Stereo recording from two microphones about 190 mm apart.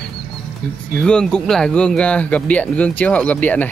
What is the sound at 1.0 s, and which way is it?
Speech, 5° left (ahead or behind).